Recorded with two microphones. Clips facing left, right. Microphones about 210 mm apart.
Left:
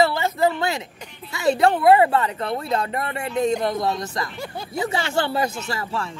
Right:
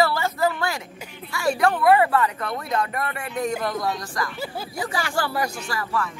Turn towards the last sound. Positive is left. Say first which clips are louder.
# even
turn(degrees=25)  # may be behind; listen again after turning